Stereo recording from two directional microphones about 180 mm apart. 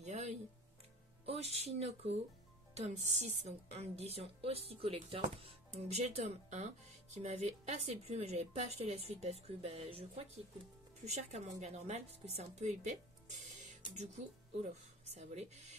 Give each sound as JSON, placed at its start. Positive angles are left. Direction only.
{"t": 0.0, "sound": "music", "side_deg": -40}
{"t": 1.2, "sound": "a woman's voice", "side_deg": -35}